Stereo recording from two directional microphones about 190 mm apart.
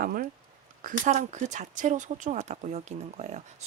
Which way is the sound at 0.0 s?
50° right (ahead or behind).